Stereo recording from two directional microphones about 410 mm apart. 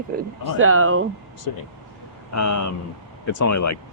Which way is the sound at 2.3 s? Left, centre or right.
Left.